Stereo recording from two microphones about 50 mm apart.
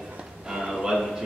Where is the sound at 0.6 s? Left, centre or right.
Centre.